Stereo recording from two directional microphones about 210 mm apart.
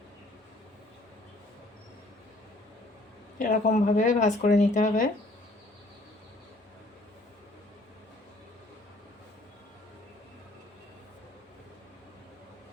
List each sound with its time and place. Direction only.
3.3 s speech: 40° left (ahead or behind)